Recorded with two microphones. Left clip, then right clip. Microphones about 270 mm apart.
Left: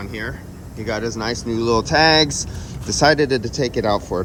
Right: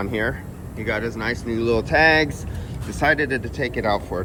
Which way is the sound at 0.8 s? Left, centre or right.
Centre.